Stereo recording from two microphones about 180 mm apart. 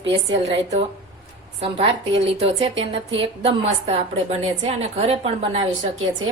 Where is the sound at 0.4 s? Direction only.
35° right (ahead or behind).